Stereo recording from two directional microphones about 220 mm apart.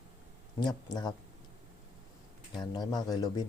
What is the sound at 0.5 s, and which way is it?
Speech, 20° left (ahead or behind).